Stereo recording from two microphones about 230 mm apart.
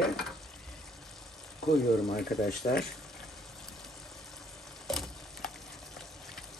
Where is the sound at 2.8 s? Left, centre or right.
Centre.